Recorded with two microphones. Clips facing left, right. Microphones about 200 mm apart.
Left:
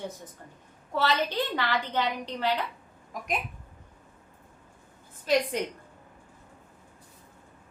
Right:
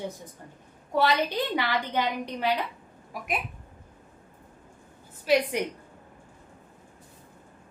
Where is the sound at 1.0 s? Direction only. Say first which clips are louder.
Right 2 dB; 15° right (ahead or behind).